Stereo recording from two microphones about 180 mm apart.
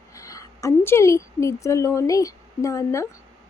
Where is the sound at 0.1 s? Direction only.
20° left (ahead or behind).